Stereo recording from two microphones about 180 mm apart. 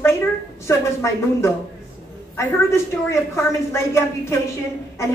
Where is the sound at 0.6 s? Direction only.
15° left (ahead or behind).